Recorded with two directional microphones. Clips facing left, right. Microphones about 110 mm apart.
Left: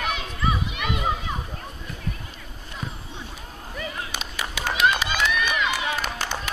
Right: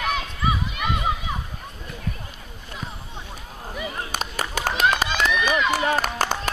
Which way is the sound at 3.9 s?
45° right (ahead or behind).